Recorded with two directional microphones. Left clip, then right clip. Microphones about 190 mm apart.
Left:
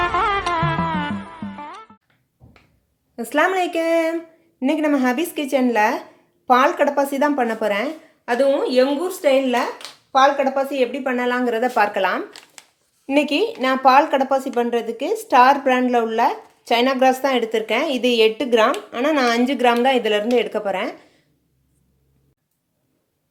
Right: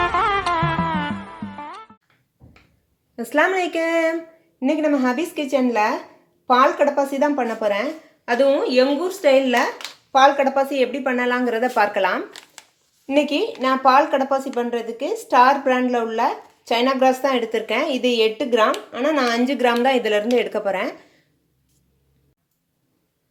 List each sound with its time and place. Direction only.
0.0 s music: centre (ahead or behind)
3.2 s speech: 5° left (ahead or behind)
4.6 s speech: 15° left (ahead or behind)
8.2 s speech: centre (ahead or behind)
13.1 s speech: 20° left (ahead or behind)